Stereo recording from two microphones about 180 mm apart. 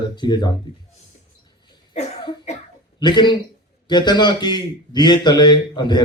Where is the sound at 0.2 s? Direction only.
25° left (ahead or behind).